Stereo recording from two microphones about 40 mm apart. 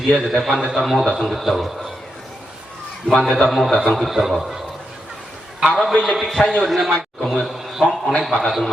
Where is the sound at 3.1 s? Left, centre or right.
Centre.